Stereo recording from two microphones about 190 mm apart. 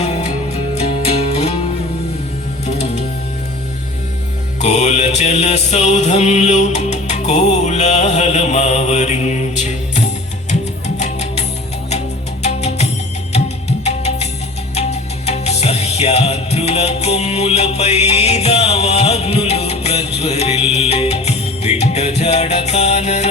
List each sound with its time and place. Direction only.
0.0 s music: 35° left (ahead or behind)
4.6 s music: 35° left (ahead or behind)